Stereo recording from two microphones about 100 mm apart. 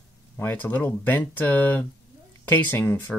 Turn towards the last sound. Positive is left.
turn(degrees=20)  # may be behind; listen again after turning